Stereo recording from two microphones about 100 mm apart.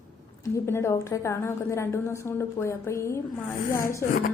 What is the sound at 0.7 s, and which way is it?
A woman's voice, 25° left (ahead or behind).